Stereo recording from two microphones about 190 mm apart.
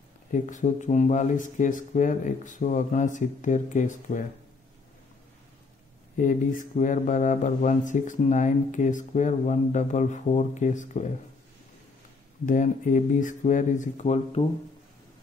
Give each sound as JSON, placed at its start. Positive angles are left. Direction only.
{"t": 0.3, "sound": "speech", "side_deg": 40}
{"t": 6.1, "sound": "speech", "side_deg": 45}
{"t": 12.4, "sound": "speech", "side_deg": 40}